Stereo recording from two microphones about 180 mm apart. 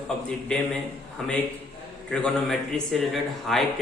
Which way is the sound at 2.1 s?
5° left (ahead or behind).